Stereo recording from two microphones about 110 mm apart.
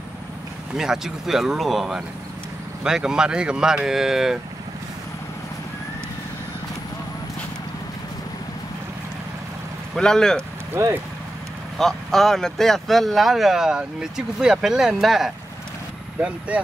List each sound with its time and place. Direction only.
0.7 s speech: 5° right (ahead or behind)
9.9 s speech: 5° left (ahead or behind)
10.7 s speech: 20° right (ahead or behind)
11.8 s speech: 5° left (ahead or behind)
16.2 s speech: 10° right (ahead or behind)